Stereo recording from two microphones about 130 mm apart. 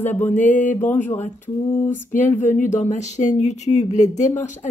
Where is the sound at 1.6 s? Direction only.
20° left (ahead or behind).